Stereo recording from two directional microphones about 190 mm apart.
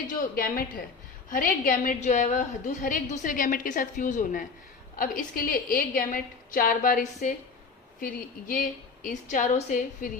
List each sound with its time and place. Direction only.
0.1 s a woman's voice: 45° left (ahead or behind)